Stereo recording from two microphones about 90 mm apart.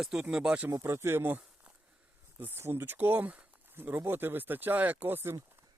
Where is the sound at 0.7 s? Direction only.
35° right (ahead or behind).